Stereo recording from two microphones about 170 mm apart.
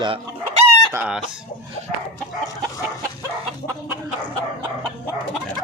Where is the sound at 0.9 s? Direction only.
10° right (ahead or behind).